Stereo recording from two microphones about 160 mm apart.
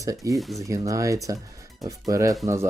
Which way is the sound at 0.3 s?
Centre (ahead or behind).